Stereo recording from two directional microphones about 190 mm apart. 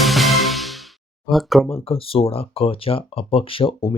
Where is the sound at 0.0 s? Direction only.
Centre (ahead or behind).